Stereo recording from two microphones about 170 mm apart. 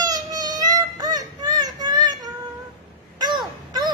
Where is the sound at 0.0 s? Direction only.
20° right (ahead or behind).